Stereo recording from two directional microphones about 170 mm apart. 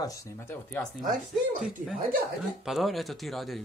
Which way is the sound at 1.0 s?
55° right (ahead or behind).